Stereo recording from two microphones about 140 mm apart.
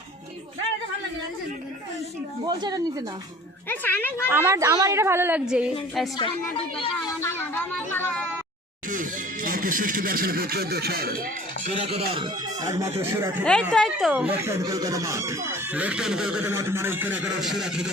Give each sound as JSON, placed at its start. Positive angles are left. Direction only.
{"t": 2.5, "sound": "speech", "side_deg": -30}
{"t": 3.7, "sound": "speech", "side_deg": 15}
{"t": 4.3, "sound": "speech", "side_deg": -20}
{"t": 6.7, "sound": "speech", "side_deg": 35}
{"t": 7.2, "sound": "speech", "side_deg": 15}
{"t": 8.9, "sound": "speech", "side_deg": -70}
{"t": 11.8, "sound": "speech", "side_deg": -40}
{"t": 12.6, "sound": "speech", "side_deg": -20}
{"t": 13.4, "sound": "speech", "side_deg": 5}
{"t": 14.1, "sound": "speech", "side_deg": -10}
{"t": 14.6, "sound": "speech", "side_deg": -25}
{"t": 16.5, "sound": "speech", "side_deg": -15}
{"t": 17.4, "sound": "speech", "side_deg": -5}